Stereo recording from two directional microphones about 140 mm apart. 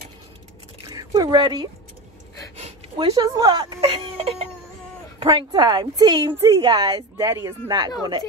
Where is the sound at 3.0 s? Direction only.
30° right (ahead or behind).